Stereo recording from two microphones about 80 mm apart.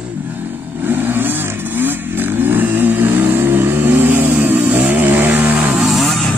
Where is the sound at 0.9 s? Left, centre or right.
Right.